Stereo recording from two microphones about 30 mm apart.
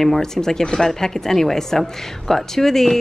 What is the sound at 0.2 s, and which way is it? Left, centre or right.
Speech, centre.